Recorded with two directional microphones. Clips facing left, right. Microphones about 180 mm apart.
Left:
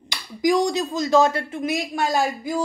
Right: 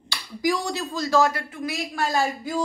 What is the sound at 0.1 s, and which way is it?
Speech, 20° left (ahead or behind).